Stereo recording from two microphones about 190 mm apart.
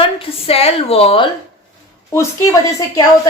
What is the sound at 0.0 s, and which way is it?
A woman's voice, 30° left (ahead or behind).